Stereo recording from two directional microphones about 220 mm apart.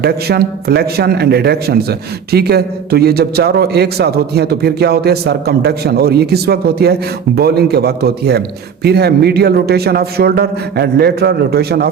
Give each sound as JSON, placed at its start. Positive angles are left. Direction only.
{"t": 0.0, "sound": "a man's voice", "side_deg": -45}